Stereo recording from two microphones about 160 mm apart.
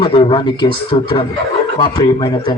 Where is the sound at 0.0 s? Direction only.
35° left (ahead or behind).